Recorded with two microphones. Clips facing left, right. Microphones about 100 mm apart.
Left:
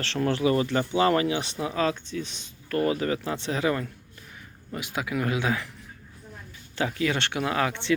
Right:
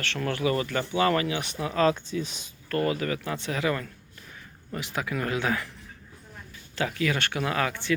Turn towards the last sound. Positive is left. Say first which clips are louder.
# left 1 dB
turn(degrees=20)  # may be behind; listen again after turning